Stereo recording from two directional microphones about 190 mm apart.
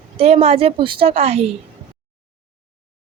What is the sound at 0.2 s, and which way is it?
A woman's voice, 30° right (ahead or behind).